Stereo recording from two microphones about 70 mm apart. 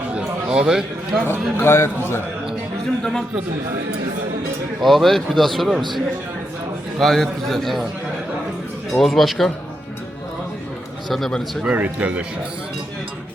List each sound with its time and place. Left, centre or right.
0.1 s a sound: centre
0.7 s a man's voice: centre
1.3 s a man's voice: left
3.0 s a man's voice: centre
4.8 s speech: centre
7.0 s speech: centre
8.9 s speech: centre
11.1 s speech: centre
11.6 s speech: right